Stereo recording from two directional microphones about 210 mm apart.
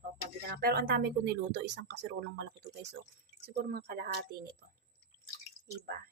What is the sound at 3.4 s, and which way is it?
Speech, 45° right (ahead or behind).